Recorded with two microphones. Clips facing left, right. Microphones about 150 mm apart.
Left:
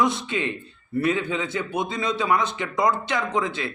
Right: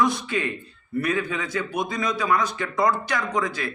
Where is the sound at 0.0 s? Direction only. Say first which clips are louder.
Even; 25° left (ahead or behind).